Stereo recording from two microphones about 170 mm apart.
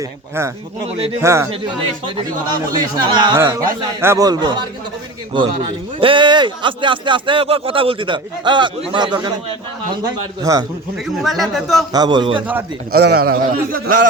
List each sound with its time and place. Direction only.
0.3 s speech: 15° right (ahead or behind)
1.5 s speech: 30° right (ahead or behind)
6.0 s speech: 30° right (ahead or behind)
10.4 s speech: 20° right (ahead or behind)
11.2 s speech: centre (ahead or behind)
11.9 s speech: 25° right (ahead or behind)
12.9 s a man's voice: 70° right (ahead or behind)